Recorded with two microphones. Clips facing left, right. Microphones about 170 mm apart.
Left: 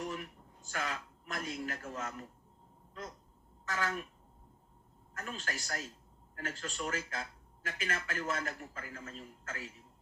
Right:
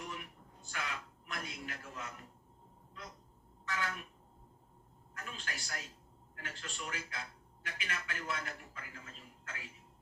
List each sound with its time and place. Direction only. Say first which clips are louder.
0.7 s a man's voice: left 4 dB; 45° left (ahead or behind)
3.7 s a man's voice: left 3 dB; 45° left (ahead or behind)
5.1 s a man's voice: left 5 dB; 45° left (ahead or behind)